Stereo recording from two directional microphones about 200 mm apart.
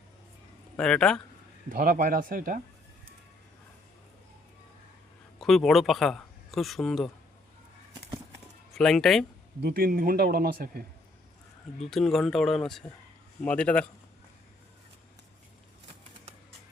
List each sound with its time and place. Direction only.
0.8 s speech: 5° left (ahead or behind)
1.7 s speech: 45° right (ahead or behind)
5.4 s speech: centre (ahead or behind)
8.7 s speech: centre (ahead or behind)
9.6 s speech: 50° right (ahead or behind)
11.9 s speech: centre (ahead or behind)